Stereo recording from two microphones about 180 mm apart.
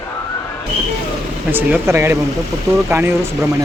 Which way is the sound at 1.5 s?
10° right (ahead or behind).